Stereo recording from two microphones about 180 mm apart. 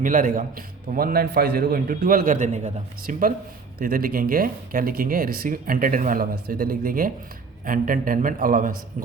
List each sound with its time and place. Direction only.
0.0 s a man's voice: 50° right (ahead or behind)